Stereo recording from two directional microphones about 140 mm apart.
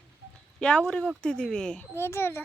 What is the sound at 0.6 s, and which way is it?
Speech, 5° left (ahead or behind).